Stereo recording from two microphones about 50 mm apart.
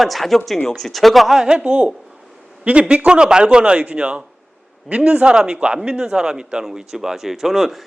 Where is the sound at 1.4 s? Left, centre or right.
Centre.